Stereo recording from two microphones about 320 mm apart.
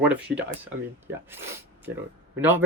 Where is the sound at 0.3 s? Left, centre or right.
Centre.